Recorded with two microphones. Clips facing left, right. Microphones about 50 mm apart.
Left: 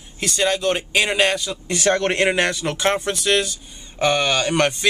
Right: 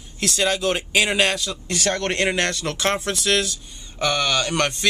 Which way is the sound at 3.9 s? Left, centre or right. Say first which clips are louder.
Left 3 dB; centre.